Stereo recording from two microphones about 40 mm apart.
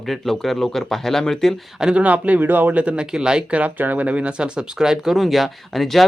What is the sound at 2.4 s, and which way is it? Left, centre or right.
Speech, right.